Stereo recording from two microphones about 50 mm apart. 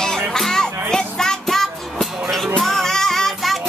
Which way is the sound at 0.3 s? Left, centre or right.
Centre.